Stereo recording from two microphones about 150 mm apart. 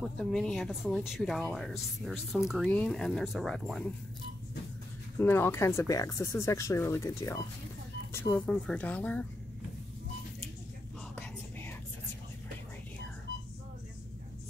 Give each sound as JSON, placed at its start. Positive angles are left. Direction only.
{"t": 0.0, "sound": "speech", "side_deg": 0}
{"t": 5.2, "sound": "speech", "side_deg": 15}